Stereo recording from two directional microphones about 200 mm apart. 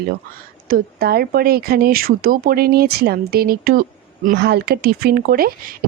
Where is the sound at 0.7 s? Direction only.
50° right (ahead or behind).